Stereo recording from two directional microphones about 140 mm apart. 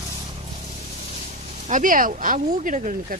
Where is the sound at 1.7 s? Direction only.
70° right (ahead or behind).